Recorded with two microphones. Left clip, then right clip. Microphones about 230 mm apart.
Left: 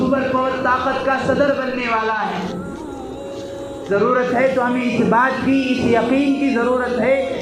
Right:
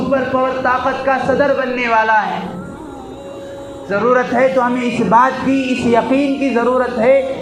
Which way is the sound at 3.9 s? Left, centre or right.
Right.